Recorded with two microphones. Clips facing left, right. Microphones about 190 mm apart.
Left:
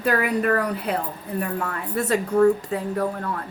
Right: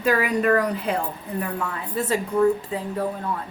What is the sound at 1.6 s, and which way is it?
Speech, 60° left (ahead or behind).